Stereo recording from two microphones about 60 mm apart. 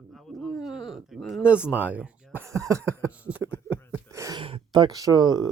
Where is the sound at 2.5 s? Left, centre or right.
Right.